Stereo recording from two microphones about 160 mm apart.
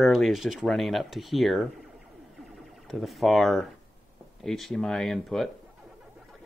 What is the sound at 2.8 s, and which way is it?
Speech, centre (ahead or behind).